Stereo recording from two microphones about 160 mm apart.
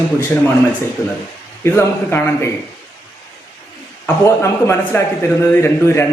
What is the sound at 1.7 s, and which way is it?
Speech, 15° left (ahead or behind).